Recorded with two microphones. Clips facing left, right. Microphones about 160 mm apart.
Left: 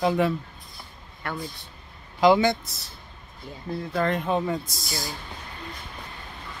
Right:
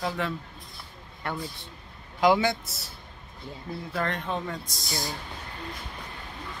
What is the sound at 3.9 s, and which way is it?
Speech, 5° left (ahead or behind).